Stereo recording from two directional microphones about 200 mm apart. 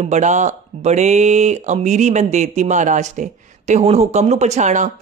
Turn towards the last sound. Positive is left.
turn(degrees=-35)  # may be behind; listen again after turning